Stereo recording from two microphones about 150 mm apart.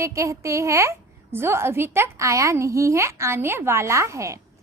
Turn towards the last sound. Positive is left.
turn(degrees=-20)  # may be behind; listen again after turning